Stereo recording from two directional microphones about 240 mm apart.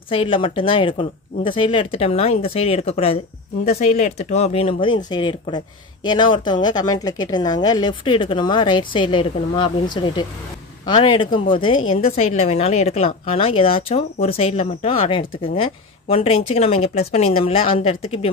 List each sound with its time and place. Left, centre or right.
0.1 s speech: left
11.7 s a woman's voice: left
12.0 s speech: left